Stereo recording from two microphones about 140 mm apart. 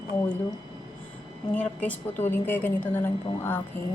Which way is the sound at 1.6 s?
10° left (ahead or behind).